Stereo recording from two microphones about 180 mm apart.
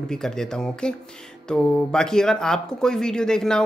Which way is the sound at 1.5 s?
5° left (ahead or behind).